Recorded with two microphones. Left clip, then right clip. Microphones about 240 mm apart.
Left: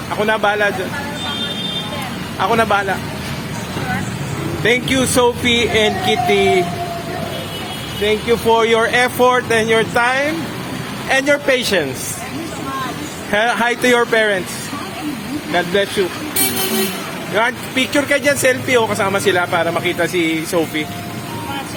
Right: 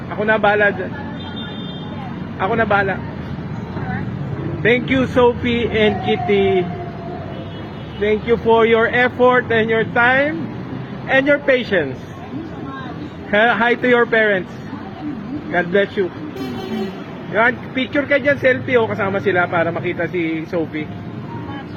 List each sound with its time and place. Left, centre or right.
0.2 s speech: centre
2.4 s speech: left
4.6 s speech: centre
8.4 s speech: left
13.3 s speech: left
15.5 s speech: centre
17.3 s speech: left